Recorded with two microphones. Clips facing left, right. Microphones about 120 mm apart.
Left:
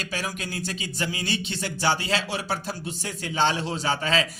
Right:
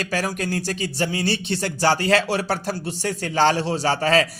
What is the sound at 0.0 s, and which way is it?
Speech, 45° right (ahead or behind).